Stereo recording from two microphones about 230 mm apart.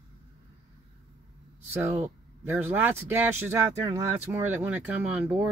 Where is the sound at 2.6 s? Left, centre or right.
Centre.